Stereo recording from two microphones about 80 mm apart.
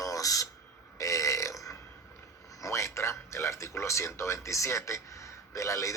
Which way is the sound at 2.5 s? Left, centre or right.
Left.